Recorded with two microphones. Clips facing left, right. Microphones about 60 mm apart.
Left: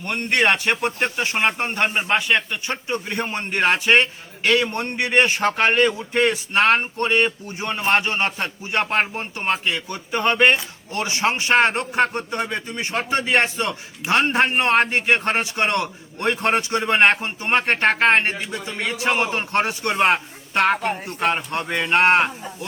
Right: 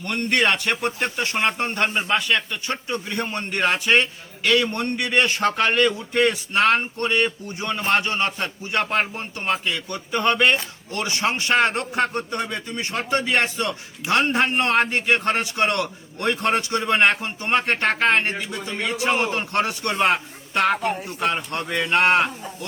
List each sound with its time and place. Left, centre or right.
0.0 s a man's voice: left